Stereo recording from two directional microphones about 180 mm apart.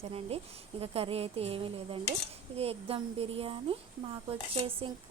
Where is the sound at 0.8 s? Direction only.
35° right (ahead or behind).